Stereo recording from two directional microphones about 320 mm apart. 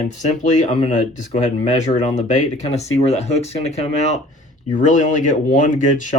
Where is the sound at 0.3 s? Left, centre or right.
Left.